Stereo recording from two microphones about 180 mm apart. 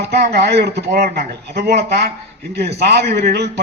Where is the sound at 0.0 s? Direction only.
65° right (ahead or behind).